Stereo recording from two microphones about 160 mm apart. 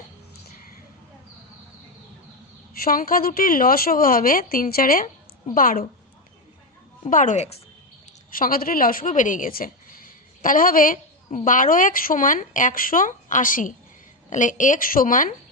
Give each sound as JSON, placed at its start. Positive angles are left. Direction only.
{"t": 2.7, "sound": "a woman's voice", "side_deg": 65}
{"t": 7.1, "sound": "speech", "side_deg": 55}
{"t": 8.3, "sound": "a woman's voice", "side_deg": 65}